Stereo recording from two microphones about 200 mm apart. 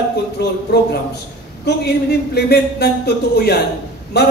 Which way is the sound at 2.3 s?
55° left (ahead or behind).